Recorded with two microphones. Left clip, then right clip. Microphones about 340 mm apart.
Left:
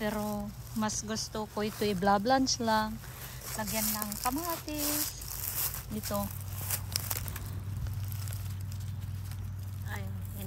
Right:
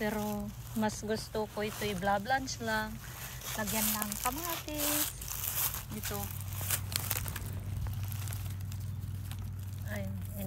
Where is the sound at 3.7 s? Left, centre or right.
Right.